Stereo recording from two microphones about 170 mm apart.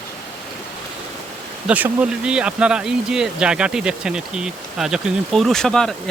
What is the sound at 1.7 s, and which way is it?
Speech, 10° right (ahead or behind).